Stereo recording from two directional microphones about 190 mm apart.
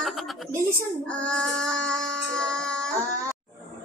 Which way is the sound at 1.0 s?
5° left (ahead or behind).